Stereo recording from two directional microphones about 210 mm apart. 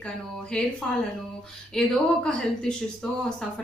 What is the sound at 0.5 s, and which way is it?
Speech, 5° left (ahead or behind).